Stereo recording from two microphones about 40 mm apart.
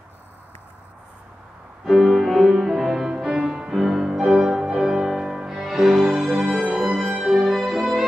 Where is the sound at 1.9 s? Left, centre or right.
Centre.